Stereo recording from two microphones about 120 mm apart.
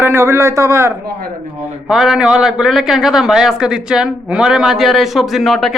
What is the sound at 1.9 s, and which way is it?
A man's voice, 5° right (ahead or behind).